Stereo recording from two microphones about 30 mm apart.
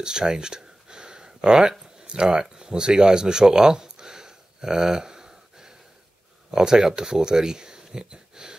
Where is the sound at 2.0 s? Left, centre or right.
Right.